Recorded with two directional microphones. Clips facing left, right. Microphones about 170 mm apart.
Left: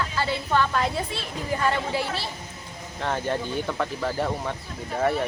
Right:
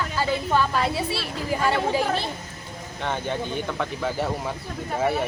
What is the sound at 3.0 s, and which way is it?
Speech, centre (ahead or behind).